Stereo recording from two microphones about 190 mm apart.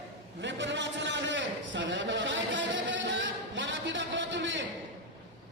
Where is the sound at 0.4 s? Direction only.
70° right (ahead or behind).